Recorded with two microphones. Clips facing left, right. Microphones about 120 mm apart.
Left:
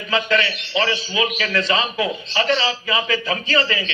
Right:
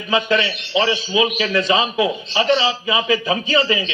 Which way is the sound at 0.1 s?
20° right (ahead or behind).